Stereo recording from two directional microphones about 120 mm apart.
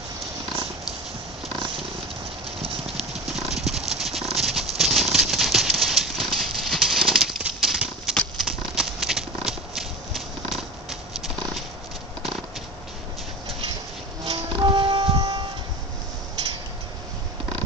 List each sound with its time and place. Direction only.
3.3 s horse: centre (ahead or behind)
14.2 s music: 40° right (ahead or behind)